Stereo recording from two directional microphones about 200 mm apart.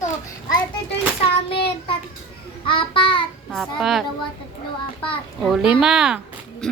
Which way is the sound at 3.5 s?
Centre (ahead or behind).